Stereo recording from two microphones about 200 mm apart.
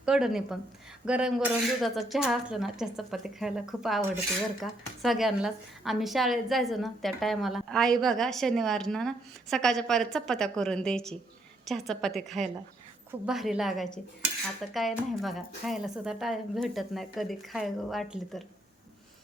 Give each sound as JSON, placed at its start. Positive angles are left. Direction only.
{"t": 0.0, "sound": "a woman's voice", "side_deg": -5}